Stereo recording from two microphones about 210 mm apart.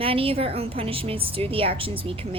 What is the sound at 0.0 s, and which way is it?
Speech, 25° right (ahead or behind).